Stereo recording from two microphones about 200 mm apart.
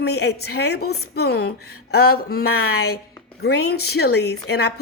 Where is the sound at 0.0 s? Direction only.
55° left (ahead or behind).